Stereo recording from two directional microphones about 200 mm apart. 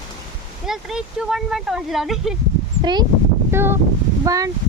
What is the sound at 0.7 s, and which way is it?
Speech, 5° right (ahead or behind).